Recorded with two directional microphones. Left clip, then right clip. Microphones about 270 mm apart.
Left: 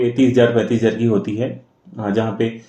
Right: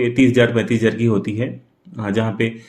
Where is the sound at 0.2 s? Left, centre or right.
Right.